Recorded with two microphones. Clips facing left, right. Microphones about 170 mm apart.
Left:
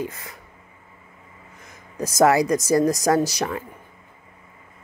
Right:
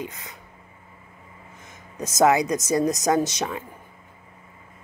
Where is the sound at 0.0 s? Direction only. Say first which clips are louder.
Left 4 dB; 20° right (ahead or behind).